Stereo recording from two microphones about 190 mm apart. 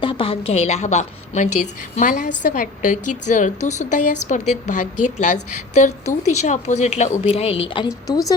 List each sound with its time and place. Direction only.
0.0 s a woman's voice: 25° left (ahead or behind)